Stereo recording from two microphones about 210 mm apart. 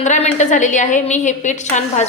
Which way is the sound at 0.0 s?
35° left (ahead or behind).